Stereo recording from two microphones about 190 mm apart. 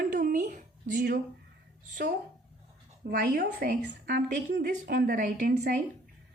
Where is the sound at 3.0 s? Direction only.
50° right (ahead or behind).